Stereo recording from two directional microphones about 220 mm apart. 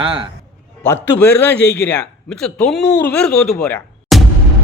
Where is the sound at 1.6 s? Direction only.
50° left (ahead or behind).